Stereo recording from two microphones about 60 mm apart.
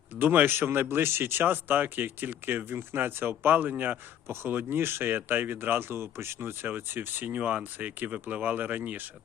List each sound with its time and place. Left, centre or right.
0.2 s speech: right